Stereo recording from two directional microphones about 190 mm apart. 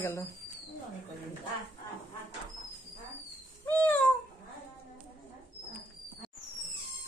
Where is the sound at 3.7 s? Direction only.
10° left (ahead or behind).